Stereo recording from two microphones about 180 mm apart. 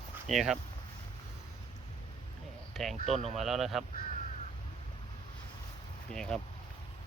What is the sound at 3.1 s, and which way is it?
Speech, 40° right (ahead or behind).